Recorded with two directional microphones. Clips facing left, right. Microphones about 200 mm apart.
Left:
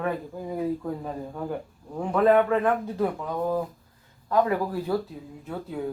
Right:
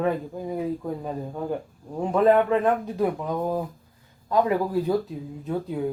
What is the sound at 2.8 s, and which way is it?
A man's voice, 15° right (ahead or behind).